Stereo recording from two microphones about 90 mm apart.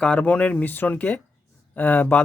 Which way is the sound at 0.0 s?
15° left (ahead or behind).